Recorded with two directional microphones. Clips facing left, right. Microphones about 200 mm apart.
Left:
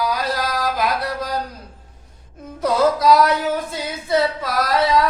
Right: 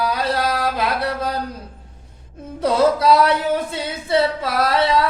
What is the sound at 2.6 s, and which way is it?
Singing, 30° right (ahead or behind).